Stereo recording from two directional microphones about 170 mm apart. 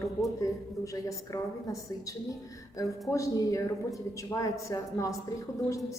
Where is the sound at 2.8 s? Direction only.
20° left (ahead or behind).